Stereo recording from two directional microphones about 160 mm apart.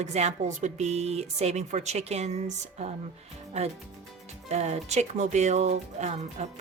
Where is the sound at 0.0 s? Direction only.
45° right (ahead or behind).